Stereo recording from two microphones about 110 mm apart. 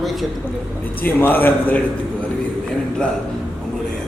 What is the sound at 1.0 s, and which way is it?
Speech, 15° left (ahead or behind).